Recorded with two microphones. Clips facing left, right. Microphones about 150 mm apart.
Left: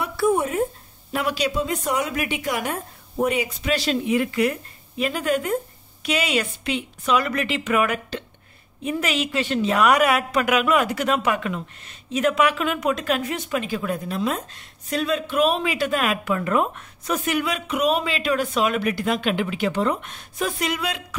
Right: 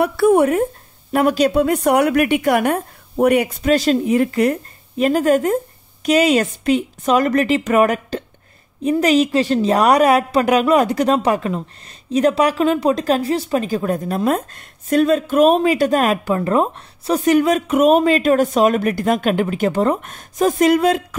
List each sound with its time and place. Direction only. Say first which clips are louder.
0.0 s speech: right 8 dB; 65° right (ahead or behind)
1.1 s a woman's voice: right 9 dB; 50° right (ahead or behind)